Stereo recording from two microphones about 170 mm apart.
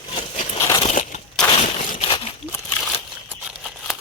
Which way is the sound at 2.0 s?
30° left (ahead or behind).